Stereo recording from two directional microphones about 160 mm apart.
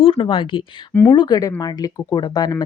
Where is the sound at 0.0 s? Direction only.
35° left (ahead or behind).